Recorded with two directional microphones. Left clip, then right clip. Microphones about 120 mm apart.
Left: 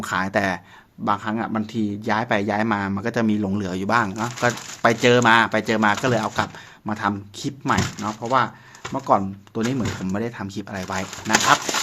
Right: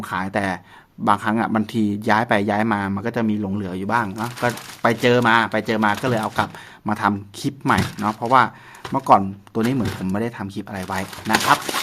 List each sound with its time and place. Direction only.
0.0 s speech: centre (ahead or behind)
1.0 s speech: 30° right (ahead or behind); by 3.2 s 5° right (ahead or behind)
3.2 s speech: 5° left (ahead or behind); by 6.5 s 10° right (ahead or behind)
6.8 s speech: 30° right (ahead or behind)
9.6 s speech: 20° right (ahead or behind)